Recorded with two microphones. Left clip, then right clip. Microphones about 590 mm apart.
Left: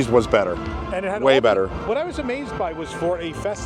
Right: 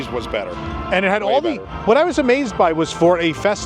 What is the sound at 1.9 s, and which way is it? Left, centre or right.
Speech, right.